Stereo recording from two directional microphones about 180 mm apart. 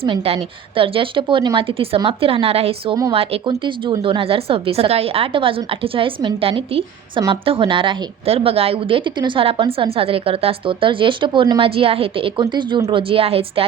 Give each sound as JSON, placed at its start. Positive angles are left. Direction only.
{"t": 0.0, "sound": "a woman's voice", "side_deg": -30}
{"t": 4.0, "sound": "a woman's voice", "side_deg": -30}